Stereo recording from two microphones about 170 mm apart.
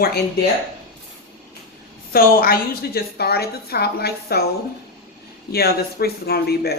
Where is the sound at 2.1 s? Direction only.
60° left (ahead or behind).